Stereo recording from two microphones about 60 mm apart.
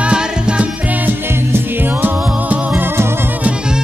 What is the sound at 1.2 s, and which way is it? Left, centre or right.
Music, right.